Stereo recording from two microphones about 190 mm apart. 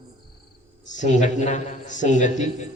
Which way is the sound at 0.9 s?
40° left (ahead or behind).